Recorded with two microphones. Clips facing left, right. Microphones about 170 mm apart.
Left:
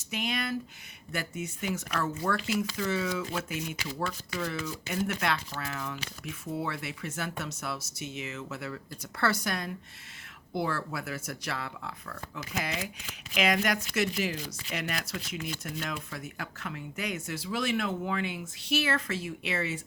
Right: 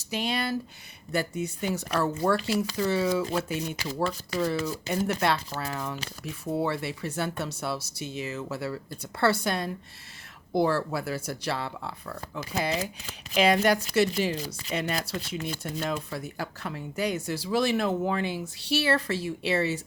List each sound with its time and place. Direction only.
0.0 s speech: 35° right (ahead or behind)